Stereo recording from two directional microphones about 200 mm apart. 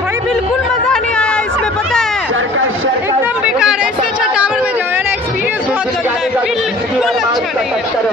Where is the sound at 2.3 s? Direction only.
80° right.